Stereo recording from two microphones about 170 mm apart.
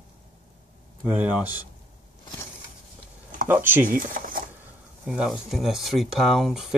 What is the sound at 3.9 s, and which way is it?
Speech, 55° right (ahead or behind).